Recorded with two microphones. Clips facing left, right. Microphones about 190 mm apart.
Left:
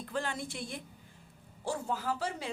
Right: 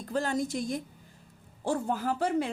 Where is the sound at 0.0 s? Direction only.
40° right (ahead or behind).